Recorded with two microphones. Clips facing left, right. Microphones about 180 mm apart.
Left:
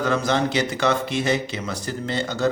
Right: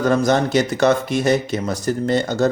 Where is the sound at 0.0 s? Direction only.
45° right (ahead or behind).